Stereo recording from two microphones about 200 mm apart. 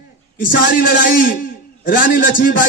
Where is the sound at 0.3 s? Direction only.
45° left (ahead or behind).